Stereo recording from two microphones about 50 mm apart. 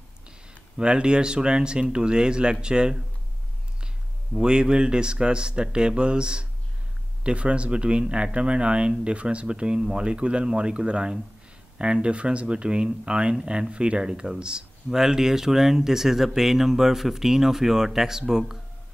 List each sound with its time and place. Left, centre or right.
0.7 s speech: centre
4.4 s speech: centre